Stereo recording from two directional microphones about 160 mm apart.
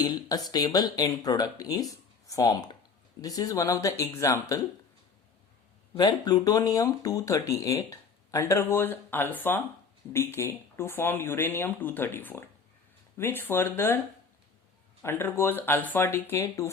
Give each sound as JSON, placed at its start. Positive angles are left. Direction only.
{"t": 0.0, "sound": "speech", "side_deg": 25}
{"t": 5.9, "sound": "speech", "side_deg": 25}
{"t": 15.0, "sound": "speech", "side_deg": 15}